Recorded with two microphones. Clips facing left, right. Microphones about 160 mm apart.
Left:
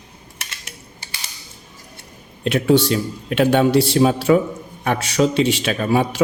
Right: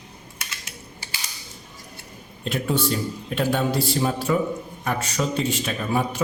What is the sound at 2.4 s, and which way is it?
A man's voice, 80° left.